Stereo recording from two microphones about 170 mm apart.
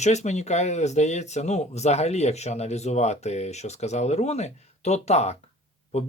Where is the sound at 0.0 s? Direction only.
40° left (ahead or behind).